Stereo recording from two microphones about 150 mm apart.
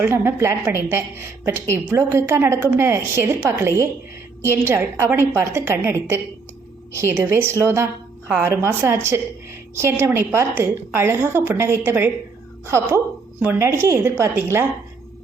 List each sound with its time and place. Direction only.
0.0 s a woman's voice: 15° right (ahead or behind)
13.4 s a woman's voice: 15° right (ahead or behind)